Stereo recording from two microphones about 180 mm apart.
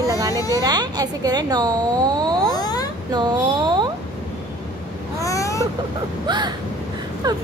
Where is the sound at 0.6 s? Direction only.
20° right (ahead or behind).